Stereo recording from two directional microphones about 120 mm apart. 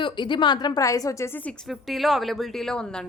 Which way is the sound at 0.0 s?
40° left (ahead or behind).